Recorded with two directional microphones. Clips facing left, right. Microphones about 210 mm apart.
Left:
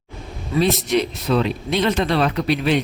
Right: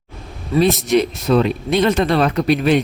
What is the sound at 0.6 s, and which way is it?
Speech, 50° right (ahead or behind).